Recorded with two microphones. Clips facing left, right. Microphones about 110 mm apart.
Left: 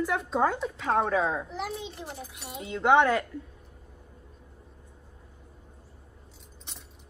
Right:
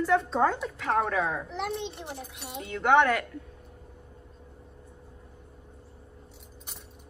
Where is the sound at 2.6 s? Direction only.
25° left (ahead or behind).